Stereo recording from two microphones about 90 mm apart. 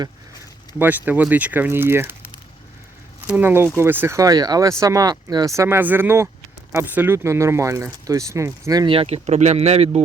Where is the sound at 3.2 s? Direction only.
20° right (ahead or behind).